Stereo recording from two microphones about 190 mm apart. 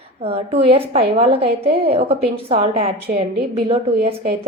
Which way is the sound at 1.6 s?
55° right (ahead or behind).